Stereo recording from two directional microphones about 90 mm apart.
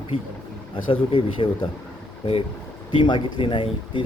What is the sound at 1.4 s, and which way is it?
Speech, 75° left (ahead or behind).